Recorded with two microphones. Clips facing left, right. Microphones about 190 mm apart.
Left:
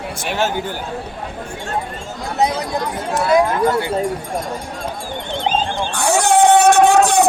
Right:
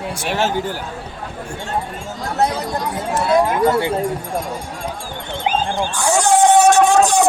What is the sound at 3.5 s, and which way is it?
Speech, 15° right (ahead or behind).